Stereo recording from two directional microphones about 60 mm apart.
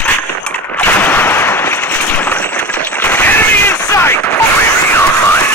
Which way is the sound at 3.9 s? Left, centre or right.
Left.